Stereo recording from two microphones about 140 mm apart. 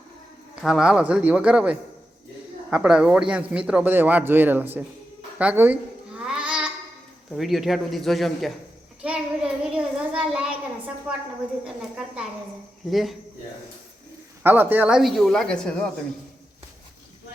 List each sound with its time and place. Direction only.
0.5 s speech: 5° right (ahead or behind)
5.4 s babbling: 10° right (ahead or behind)
7.3 s speech: centre (ahead or behind)
12.9 s speech: centre (ahead or behind)
14.4 s speech: 15° right (ahead or behind); by 15.9 s 5° left (ahead or behind)